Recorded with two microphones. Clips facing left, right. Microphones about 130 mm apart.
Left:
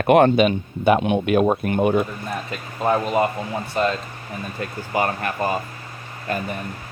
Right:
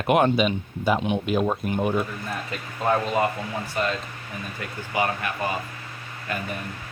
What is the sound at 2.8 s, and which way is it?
A man's voice, 20° left (ahead or behind).